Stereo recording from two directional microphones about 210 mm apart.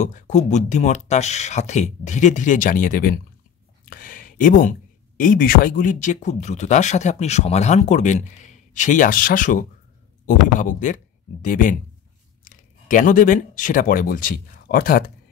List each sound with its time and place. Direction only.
0.0 s speech: 35° left (ahead or behind)